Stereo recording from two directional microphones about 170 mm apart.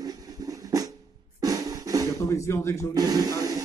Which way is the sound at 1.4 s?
20° right (ahead or behind).